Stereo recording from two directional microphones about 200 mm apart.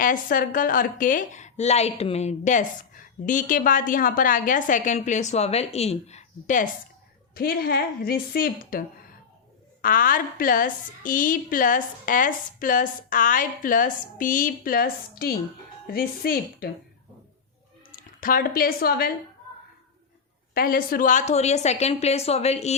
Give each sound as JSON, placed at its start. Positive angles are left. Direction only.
{"t": 0.0, "sound": "a woman's voice", "side_deg": 45}
{"t": 7.3, "sound": "a woman's voice", "side_deg": 50}
{"t": 9.8, "sound": "a woman's voice", "side_deg": 45}
{"t": 17.9, "sound": "a woman's voice", "side_deg": 45}
{"t": 20.5, "sound": "a woman's voice", "side_deg": 45}